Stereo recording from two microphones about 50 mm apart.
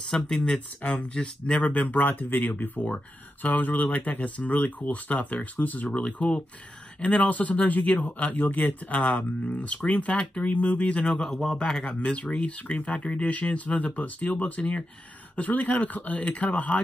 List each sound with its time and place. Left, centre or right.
0.1 s speech: centre
0.8 s speech: left
6.0 s speech: left
11.1 s speech: centre; by 16.8 s left